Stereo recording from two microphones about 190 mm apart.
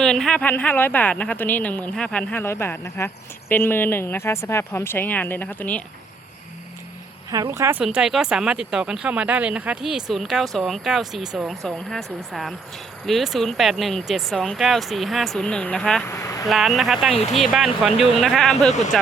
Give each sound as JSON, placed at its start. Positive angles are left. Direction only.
{"t": 0.0, "sound": "speech", "side_deg": 5}
{"t": 7.3, "sound": "speech", "side_deg": -15}
{"t": 7.8, "sound": "speech", "side_deg": -5}
{"t": 16.1, "sound": "a sound", "side_deg": 15}
{"t": 16.5, "sound": "speech", "side_deg": 0}